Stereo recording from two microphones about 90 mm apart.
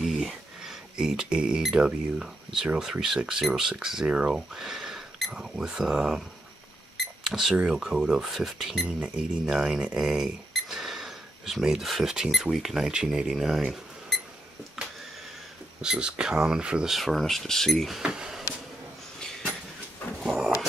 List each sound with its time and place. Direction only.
0.0 s speech: centre (ahead or behind)
14.8 s a sound: centre (ahead or behind)
15.8 s speech: 10° right (ahead or behind)